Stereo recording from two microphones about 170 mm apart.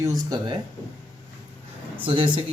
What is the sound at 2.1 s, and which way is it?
Speech, 30° right (ahead or behind).